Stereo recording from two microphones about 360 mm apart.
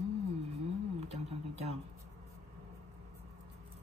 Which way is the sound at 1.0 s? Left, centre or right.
Centre.